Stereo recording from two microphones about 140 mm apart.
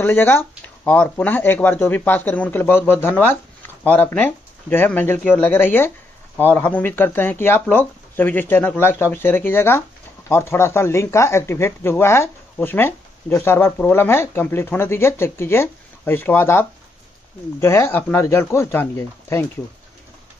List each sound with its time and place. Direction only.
0.0 s speech: 15° left (ahead or behind)